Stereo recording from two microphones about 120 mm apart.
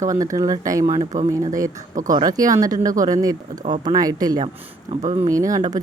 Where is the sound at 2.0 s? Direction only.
30° right (ahead or behind).